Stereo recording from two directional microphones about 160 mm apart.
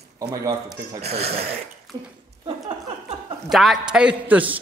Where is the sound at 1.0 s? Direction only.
40° right (ahead or behind).